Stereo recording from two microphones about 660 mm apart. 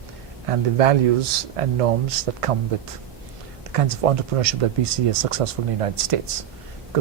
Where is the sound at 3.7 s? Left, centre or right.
Right.